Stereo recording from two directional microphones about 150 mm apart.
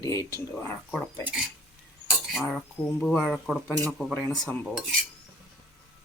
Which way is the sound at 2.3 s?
Centre (ahead or behind).